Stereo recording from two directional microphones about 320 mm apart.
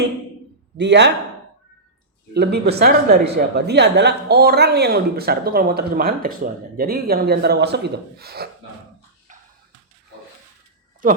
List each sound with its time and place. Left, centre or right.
0.8 s speech: right
2.3 s speech: right
11.0 s speech: right